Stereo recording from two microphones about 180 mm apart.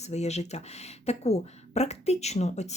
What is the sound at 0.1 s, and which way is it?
Speech, 35° left (ahead or behind).